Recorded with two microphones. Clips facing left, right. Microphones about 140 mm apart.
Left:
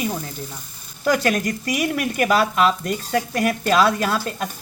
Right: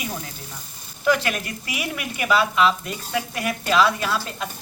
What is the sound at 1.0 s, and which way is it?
Speech, 40° left (ahead or behind).